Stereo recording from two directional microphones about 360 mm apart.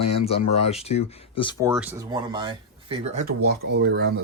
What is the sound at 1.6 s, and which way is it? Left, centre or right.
Speech, centre.